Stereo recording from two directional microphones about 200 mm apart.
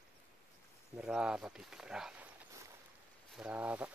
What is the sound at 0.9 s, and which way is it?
Speech, 5° right (ahead or behind).